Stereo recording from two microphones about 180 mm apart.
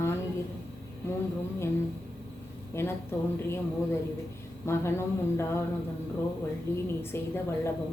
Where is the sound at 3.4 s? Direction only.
15° left (ahead or behind).